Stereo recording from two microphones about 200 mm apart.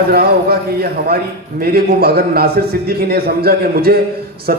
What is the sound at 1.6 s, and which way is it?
A man's voice, 50° right (ahead or behind).